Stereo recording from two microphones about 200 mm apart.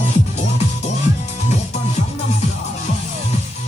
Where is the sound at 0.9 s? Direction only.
35° left (ahead or behind).